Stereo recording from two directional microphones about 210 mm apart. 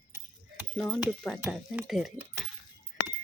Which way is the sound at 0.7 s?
5° left (ahead or behind).